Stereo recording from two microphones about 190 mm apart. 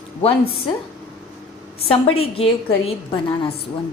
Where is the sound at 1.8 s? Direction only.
30° left (ahead or behind).